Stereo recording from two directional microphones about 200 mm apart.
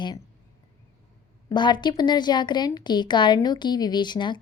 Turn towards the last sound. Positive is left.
turn(degrees=20)  # may be behind; listen again after turning